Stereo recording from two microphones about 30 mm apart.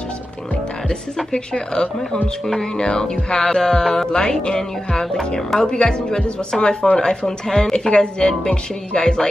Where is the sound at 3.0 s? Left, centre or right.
Left.